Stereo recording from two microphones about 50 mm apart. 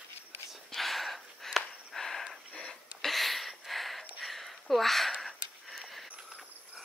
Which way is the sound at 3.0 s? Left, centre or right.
Centre.